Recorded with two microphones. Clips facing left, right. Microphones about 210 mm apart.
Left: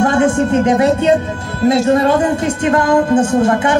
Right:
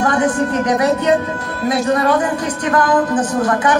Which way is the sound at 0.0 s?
25° left (ahead or behind).